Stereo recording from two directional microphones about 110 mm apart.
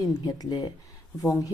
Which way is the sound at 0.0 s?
35° left (ahead or behind).